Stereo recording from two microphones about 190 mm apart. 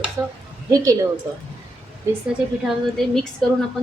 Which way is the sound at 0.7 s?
20° right (ahead or behind).